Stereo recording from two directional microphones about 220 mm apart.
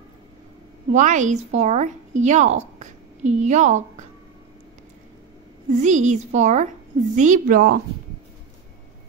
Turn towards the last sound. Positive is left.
turn(degrees=-35)  # may be behind; listen again after turning